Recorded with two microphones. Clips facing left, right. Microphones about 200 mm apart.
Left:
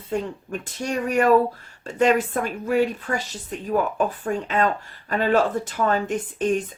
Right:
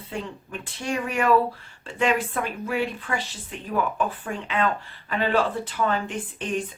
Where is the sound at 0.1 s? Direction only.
40° left (ahead or behind).